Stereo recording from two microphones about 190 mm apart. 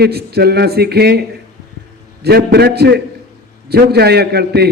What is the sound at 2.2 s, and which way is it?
A man's voice, 60° right (ahead or behind).